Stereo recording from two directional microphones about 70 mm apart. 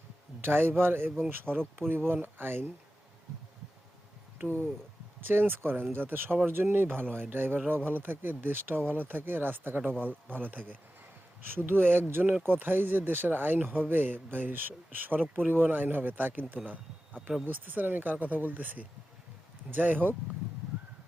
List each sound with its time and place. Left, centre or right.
0.4 s speech: right
1.5 s speech: centre
1.9 s speech: right
5.3 s speech: right
16.6 s a sound: right
17.4 s speech: right